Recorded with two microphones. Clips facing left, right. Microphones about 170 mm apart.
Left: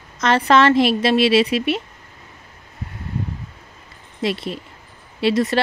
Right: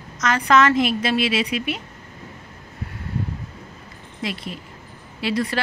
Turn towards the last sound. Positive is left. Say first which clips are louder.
# left 5 dB
turn(degrees=25)  # may be behind; listen again after turning